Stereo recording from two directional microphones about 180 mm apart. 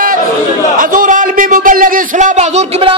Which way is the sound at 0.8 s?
50° right (ahead or behind).